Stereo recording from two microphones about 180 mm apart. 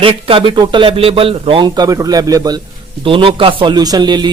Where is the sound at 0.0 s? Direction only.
30° right (ahead or behind).